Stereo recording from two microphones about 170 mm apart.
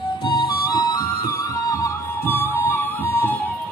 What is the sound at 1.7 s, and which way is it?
Music, 15° left (ahead or behind).